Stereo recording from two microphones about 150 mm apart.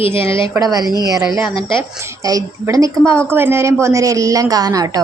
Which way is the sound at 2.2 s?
25° right (ahead or behind).